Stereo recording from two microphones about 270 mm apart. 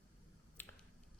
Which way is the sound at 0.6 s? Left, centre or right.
Centre.